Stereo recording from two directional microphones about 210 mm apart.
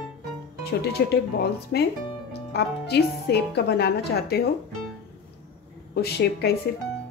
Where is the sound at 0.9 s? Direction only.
50° left (ahead or behind).